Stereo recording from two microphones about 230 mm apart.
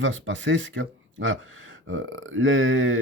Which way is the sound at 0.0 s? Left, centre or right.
Right.